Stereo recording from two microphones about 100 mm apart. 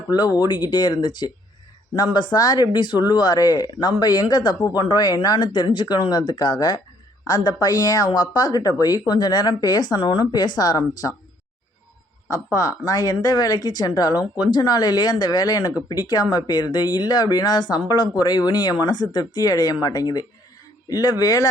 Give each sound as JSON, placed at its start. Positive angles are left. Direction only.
{"t": 0.1, "sound": "speech", "side_deg": 40}
{"t": 12.3, "sound": "speech", "side_deg": 35}